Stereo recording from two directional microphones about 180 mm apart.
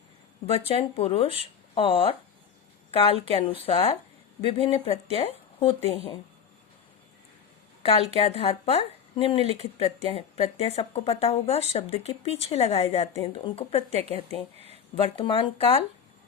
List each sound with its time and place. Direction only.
0.5 s speech: 35° left (ahead or behind)
7.8 s a sound: 35° left (ahead or behind)
8.2 s speech: 35° left (ahead or behind)
14.9 s speech: 30° left (ahead or behind)